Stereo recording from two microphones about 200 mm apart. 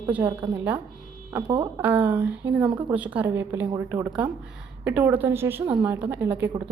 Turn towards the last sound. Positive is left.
turn(degrees=-10)  # may be behind; listen again after turning